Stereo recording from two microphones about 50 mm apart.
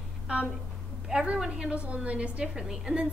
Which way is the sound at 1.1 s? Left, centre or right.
Centre.